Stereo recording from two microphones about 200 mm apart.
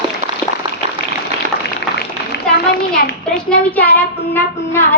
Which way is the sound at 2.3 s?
55° left (ahead or behind).